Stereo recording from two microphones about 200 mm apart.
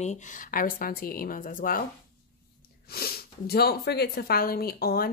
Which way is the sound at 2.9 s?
50° left (ahead or behind).